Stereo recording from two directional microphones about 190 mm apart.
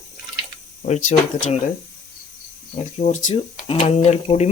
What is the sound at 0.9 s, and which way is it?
Speech, 40° left (ahead or behind).